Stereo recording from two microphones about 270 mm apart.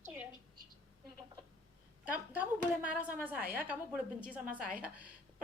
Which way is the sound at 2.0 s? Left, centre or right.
Centre.